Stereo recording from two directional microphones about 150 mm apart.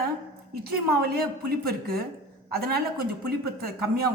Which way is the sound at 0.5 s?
90° right.